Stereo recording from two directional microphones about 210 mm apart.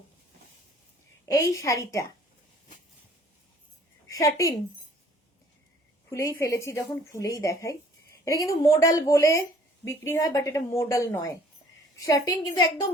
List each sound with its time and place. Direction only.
1.2 s a woman's voice: 15° left (ahead or behind)
4.1 s a woman's voice: 15° left (ahead or behind)
6.1 s a woman's voice: 15° left (ahead or behind)